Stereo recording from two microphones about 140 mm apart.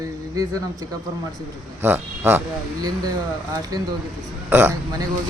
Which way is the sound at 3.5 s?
25° right (ahead or behind).